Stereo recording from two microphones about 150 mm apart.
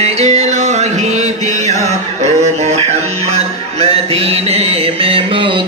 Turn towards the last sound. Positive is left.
turn(degrees=-30)  # may be behind; listen again after turning